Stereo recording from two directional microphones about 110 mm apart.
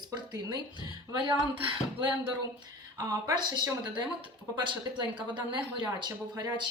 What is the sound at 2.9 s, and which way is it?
Speech, 30° right (ahead or behind).